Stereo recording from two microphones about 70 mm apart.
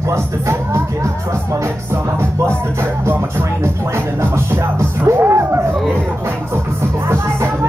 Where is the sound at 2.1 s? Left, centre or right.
Right.